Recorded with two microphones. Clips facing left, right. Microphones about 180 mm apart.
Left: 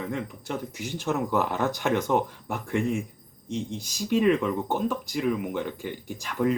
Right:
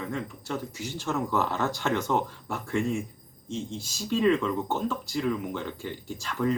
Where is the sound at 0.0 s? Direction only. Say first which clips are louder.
Left 2 dB; 15° left (ahead or behind).